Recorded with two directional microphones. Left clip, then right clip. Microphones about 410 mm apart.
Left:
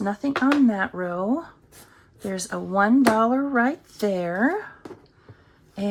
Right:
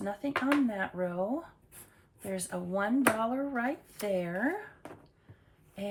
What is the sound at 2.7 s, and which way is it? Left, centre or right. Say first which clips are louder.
Speech: left 10 dB; centre.